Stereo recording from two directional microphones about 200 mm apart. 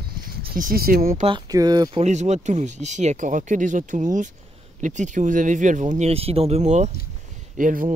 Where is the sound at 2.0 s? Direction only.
35° right (ahead or behind).